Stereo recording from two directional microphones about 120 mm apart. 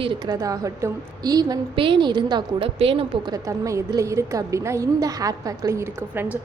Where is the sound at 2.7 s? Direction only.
50° right (ahead or behind).